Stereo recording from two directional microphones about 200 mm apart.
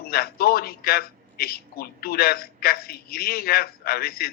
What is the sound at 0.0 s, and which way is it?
A man's voice, 50° left (ahead or behind).